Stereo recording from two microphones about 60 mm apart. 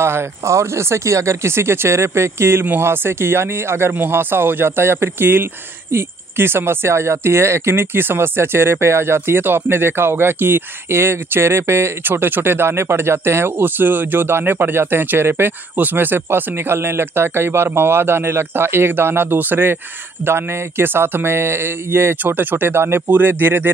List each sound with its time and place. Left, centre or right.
0.0 s speech: right
2.6 s speech: right
22.2 s speech: right